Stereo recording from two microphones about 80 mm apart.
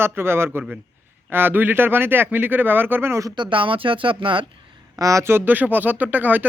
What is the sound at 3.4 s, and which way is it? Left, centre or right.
Speech, right.